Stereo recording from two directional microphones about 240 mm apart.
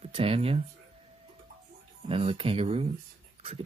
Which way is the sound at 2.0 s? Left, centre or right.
Right.